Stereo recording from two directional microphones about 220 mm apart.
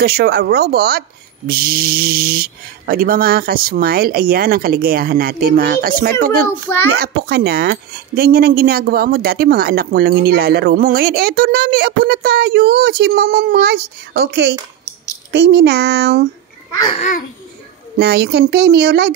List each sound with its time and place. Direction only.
0.0 s speech: 45° right (ahead or behind)
17.9 s speech: 45° right (ahead or behind)